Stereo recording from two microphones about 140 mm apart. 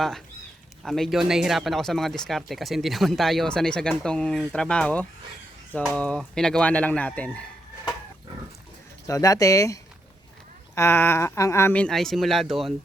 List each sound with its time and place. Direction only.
0.8 s speech: centre (ahead or behind)
9.0 s speech: 25° left (ahead or behind)
10.8 s speech: 15° left (ahead or behind); by 12.7 s centre (ahead or behind)